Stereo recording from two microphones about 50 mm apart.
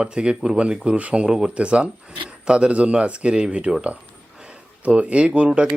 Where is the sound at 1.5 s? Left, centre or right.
Right.